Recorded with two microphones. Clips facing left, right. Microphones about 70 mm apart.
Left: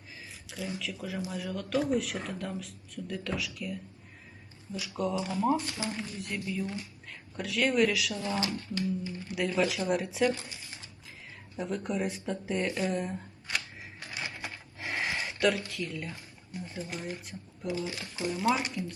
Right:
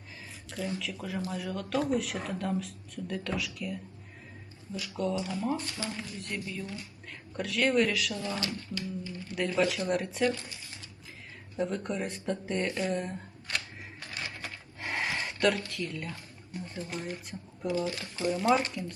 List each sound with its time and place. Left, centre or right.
0.8 s speech: centre
6.1 s speech: centre
8.1 s speech: left
9.3 s speech: centre
11.6 s speech: centre
14.0 s a sound: centre
14.8 s a sound: centre
15.7 s speech: centre
17.8 s speech: centre
18.3 s speech: centre